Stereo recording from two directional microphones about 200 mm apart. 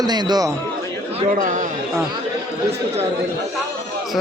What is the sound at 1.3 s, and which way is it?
Speech, 40° right (ahead or behind).